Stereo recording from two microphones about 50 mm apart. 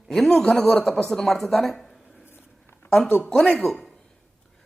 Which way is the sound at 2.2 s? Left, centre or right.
Left.